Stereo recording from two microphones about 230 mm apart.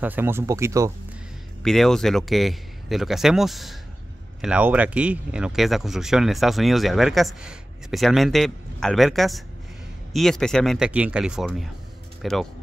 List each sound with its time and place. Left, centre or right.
0.0 s speech: centre
1.6 s speech: centre